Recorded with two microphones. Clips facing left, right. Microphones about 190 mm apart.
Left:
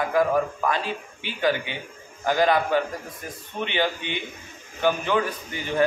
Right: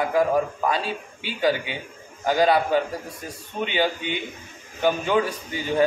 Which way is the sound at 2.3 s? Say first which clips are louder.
Right 1 dB; 10° right (ahead or behind).